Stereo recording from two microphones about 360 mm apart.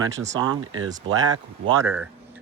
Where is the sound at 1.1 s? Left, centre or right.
Right.